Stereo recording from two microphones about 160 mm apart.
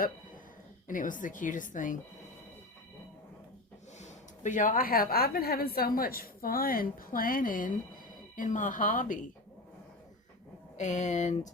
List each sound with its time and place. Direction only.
0.9 s a woman's voice: 55° left (ahead or behind)
3.9 s a woman's voice: 50° left (ahead or behind)
10.8 s speech: 45° left (ahead or behind)